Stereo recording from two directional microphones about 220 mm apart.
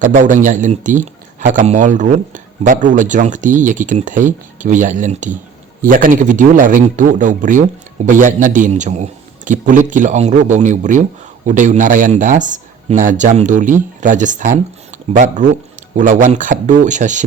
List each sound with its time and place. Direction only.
0.0 s a man's voice: 35° right (ahead or behind)